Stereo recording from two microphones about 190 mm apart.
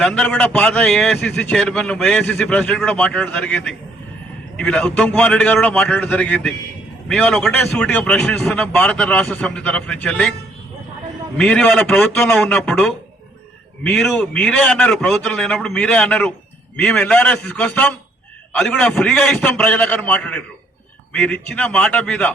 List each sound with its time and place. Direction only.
0.0 s a man's voice: 5° left (ahead or behind)
11.3 s a man's voice: 5° left (ahead or behind)